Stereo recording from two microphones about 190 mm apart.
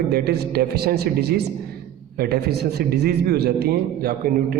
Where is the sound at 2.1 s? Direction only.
55° right (ahead or behind).